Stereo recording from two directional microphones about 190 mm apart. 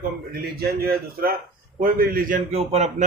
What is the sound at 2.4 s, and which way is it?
Speech, 35° right (ahead or behind).